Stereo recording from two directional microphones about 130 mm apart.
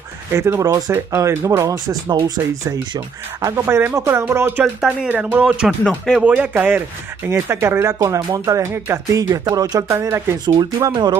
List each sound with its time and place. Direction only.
0.3 s speech: 20° right (ahead or behind)
3.4 s speech: 20° right (ahead or behind)
10.4 s speech: 35° right (ahead or behind)